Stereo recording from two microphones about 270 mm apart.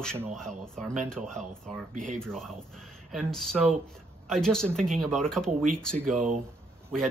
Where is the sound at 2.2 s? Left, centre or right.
Centre.